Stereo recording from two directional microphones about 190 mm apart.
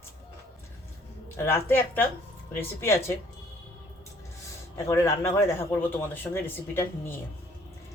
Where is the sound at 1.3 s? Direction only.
15° left (ahead or behind).